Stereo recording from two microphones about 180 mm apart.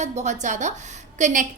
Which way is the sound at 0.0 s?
40° right (ahead or behind).